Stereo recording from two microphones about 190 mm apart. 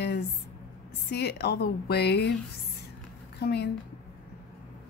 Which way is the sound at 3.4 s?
60° left (ahead or behind).